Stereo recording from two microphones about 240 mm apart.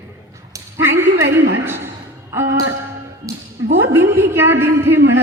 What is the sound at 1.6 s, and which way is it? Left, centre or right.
Speech, centre.